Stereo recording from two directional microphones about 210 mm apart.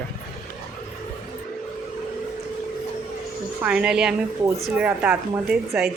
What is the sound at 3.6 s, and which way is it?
Speech, 5° right (ahead or behind).